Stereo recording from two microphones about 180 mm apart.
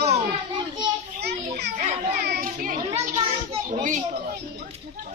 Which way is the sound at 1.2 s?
70° right (ahead or behind).